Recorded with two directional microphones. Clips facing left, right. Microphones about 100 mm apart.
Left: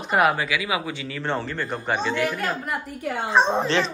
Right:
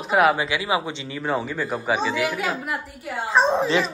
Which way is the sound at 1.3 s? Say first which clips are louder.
Right 3 dB; 5° right (ahead or behind).